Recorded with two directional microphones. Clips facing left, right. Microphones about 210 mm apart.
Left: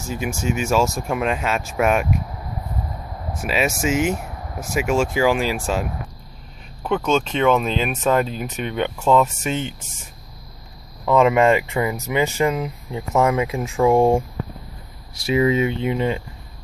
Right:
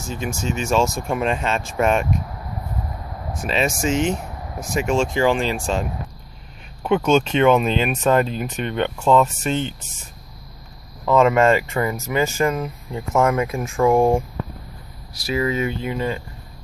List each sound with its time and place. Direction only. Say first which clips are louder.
0.1 s speech: left 2 dB; 10° left (ahead or behind)
3.3 s speech: even; 5° left (ahead or behind)
11.1 s speech: even; 15° left (ahead or behind)
15.1 s speech: left 4 dB; 25° left (ahead or behind)